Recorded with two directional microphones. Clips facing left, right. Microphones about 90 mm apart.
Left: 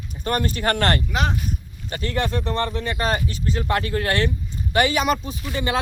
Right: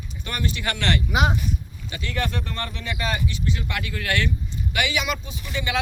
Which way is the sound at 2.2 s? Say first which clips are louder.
Left 6 dB; 30° left (ahead or behind).